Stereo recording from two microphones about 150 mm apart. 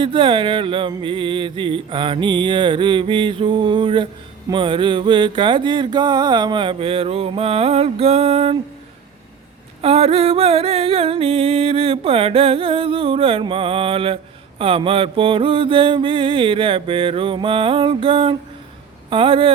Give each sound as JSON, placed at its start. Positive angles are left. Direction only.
{"t": 0.0, "sound": "music", "side_deg": -35}
{"t": 9.8, "sound": "music", "side_deg": -40}